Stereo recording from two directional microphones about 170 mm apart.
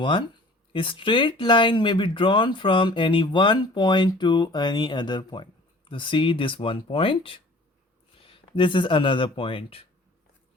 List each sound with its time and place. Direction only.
0.0 s speech: 30° left (ahead or behind)